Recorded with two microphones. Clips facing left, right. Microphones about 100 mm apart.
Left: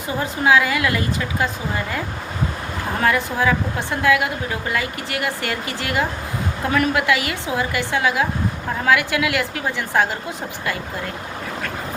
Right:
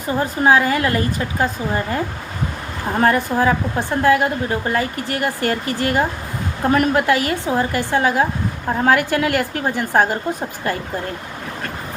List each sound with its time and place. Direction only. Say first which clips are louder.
0.2 s a woman's voice: right 2 dB; 40° right (ahead or behind)